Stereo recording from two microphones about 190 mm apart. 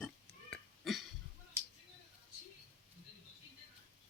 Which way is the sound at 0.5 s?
Centre (ahead or behind).